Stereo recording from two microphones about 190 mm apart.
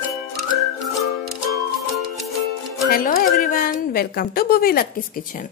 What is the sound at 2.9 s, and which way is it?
A woman's voice, 45° left (ahead or behind).